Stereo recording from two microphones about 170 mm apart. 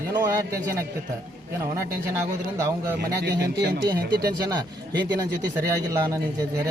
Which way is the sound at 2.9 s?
75° right (ahead or behind).